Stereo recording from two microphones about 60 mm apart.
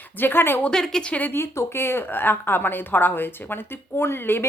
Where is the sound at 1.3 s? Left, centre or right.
Left.